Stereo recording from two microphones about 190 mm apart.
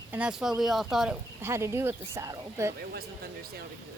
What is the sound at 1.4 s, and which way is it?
A woman's voice, 15° right (ahead or behind).